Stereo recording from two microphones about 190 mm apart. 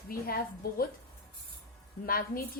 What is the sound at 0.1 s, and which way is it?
Speech, 50° left (ahead or behind).